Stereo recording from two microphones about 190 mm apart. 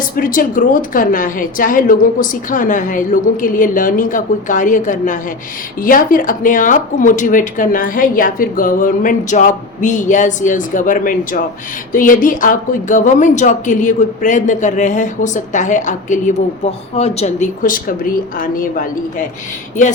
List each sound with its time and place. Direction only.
0.2 s speech: 45° left (ahead or behind)